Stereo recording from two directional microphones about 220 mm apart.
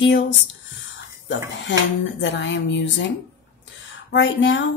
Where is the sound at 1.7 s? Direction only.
55° left (ahead or behind).